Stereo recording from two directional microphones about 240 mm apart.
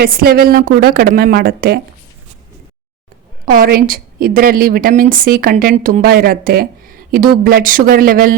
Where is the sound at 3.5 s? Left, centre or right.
Right.